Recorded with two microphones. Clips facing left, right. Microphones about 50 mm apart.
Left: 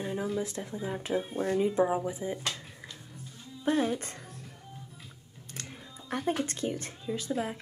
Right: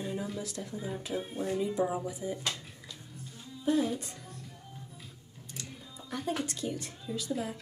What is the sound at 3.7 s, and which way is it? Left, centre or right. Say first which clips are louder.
Speech: left 1 dB; left.